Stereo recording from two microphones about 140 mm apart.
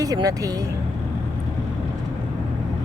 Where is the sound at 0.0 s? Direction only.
25° right (ahead or behind).